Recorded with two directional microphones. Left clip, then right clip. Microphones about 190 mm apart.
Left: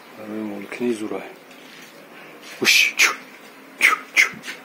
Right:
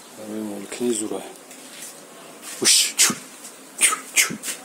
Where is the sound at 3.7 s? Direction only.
10° right (ahead or behind).